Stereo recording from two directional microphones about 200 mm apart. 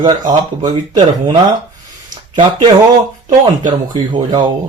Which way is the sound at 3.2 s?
35° right (ahead or behind).